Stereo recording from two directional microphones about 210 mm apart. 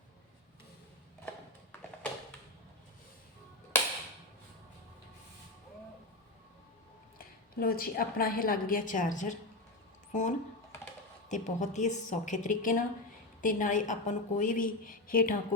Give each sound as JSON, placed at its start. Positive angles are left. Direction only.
{"t": 7.2, "sound": "a woman's voice", "side_deg": 45}